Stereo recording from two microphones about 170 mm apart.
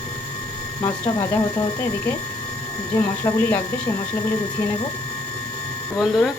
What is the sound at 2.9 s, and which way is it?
Speech, 15° left (ahead or behind).